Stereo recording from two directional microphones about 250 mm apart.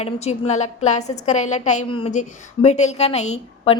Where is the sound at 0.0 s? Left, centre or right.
Left.